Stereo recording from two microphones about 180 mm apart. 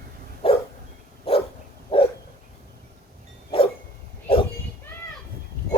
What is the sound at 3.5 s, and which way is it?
Dog, 30° left (ahead or behind).